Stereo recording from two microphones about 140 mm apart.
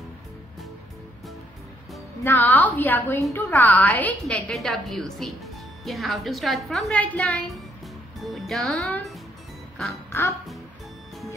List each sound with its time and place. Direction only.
2.2 s a woman's voice: 15° left (ahead or behind)
4.2 s speech: centre (ahead or behind)
10.1 s a woman's voice: 15° left (ahead or behind)